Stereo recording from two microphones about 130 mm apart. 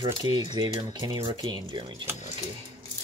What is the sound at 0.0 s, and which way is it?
Speech, 30° right (ahead or behind).